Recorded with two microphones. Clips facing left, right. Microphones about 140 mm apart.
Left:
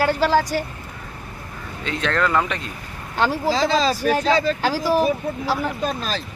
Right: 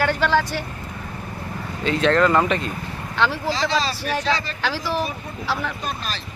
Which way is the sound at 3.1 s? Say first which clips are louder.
Left 2 dB; 40° left (ahead or behind).